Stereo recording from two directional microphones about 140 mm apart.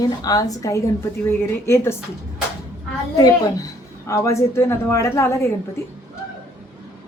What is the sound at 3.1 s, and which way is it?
A woman's voice, 25° left (ahead or behind).